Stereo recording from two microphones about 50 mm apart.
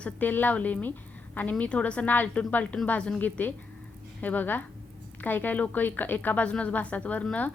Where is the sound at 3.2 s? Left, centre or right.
Left.